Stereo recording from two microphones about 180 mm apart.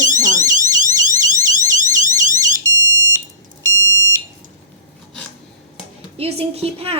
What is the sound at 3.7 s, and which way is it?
Smoke detector, 90° left.